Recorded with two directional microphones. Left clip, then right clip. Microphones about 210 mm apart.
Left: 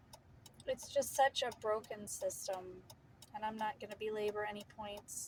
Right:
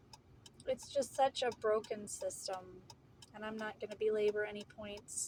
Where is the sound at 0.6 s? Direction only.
20° left (ahead or behind).